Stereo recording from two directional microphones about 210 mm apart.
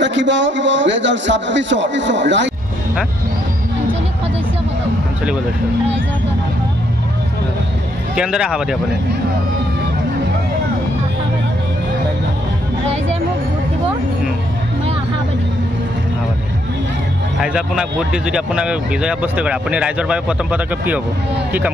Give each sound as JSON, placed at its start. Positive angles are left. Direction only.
{"t": 0.0, "sound": "a man's voice", "side_deg": -60}
{"t": 8.2, "sound": "speech", "side_deg": -5}
{"t": 17.4, "sound": "speech", "side_deg": -5}